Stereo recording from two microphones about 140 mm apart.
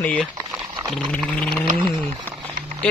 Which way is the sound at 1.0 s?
10° left (ahead or behind).